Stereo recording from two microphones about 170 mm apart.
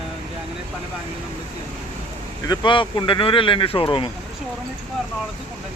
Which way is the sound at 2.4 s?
25° left (ahead or behind).